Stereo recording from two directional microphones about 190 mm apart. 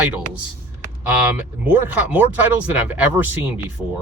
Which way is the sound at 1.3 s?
10° right (ahead or behind).